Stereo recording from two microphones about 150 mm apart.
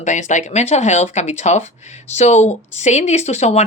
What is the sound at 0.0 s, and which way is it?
Speech, 55° left (ahead or behind).